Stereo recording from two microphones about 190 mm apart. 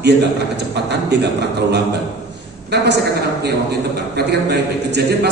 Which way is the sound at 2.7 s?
65° right (ahead or behind).